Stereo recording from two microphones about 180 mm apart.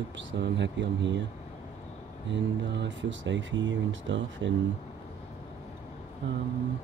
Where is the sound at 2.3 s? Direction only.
90° right.